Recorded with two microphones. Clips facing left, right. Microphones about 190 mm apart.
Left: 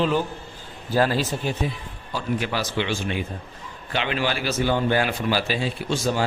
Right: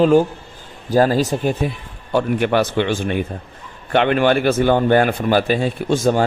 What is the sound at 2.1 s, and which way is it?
A man's voice, 60° right (ahead or behind).